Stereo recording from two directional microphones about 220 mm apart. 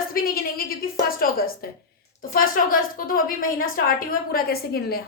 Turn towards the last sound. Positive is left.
turn(degrees=45)  # may be behind; listen again after turning